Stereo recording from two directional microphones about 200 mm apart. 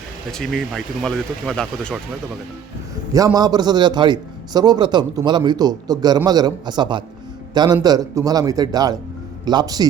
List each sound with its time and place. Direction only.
0.3 s speech: centre (ahead or behind)
3.1 s a man's voice: 15° right (ahead or behind)